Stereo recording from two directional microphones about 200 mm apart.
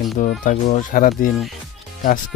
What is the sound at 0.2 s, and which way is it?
Speech, 40° left (ahead or behind).